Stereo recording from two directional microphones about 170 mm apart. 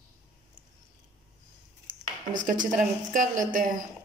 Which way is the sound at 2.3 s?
50° right (ahead or behind).